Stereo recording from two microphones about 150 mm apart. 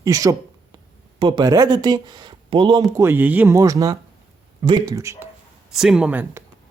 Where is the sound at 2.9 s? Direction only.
15° right (ahead or behind).